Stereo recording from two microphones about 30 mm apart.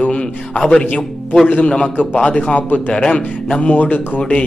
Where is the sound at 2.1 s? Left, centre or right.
Left.